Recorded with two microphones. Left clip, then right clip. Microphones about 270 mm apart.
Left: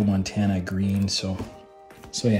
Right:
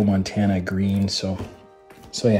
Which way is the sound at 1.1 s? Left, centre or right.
Centre.